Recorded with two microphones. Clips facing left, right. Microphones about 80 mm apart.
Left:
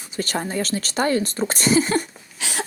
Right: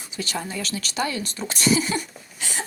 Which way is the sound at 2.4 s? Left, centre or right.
Left.